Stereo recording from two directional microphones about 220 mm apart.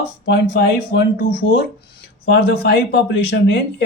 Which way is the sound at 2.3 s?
50° left (ahead or behind).